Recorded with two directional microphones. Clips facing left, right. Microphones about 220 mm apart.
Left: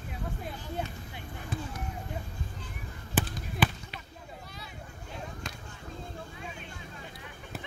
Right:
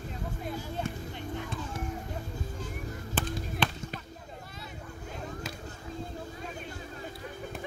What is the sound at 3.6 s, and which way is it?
Basketball bounce, 5° left (ahead or behind).